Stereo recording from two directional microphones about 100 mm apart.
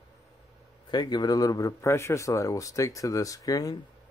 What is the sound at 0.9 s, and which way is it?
Speech, 45° left (ahead or behind).